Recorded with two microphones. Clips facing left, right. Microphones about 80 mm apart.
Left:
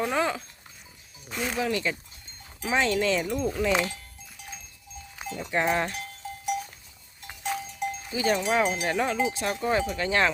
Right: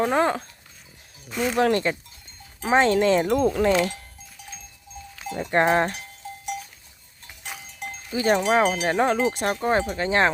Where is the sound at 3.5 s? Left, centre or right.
Right.